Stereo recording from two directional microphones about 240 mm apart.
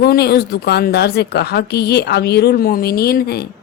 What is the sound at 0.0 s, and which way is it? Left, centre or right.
A woman's voice, left.